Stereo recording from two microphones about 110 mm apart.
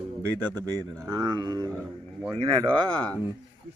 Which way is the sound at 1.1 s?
35° right (ahead or behind).